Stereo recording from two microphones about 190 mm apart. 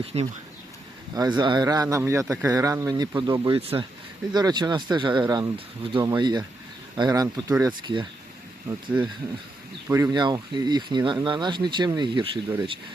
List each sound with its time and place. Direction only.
0.0 s speech: 35° right (ahead or behind)
1.1 s speech: 20° right (ahead or behind)
9.9 s speech: 20° right (ahead or behind)